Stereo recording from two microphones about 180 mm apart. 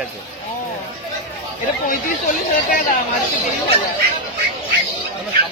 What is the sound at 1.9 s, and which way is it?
Speech, 50° left (ahead or behind).